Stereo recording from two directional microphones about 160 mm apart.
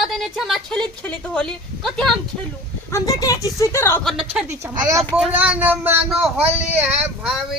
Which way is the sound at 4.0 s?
Centre (ahead or behind).